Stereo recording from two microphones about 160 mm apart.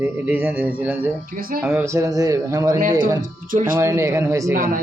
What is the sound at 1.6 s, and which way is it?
Speech, 10° right (ahead or behind).